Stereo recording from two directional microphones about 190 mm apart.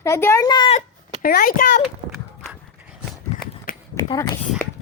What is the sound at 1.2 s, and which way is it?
Speech, 50° left (ahead or behind).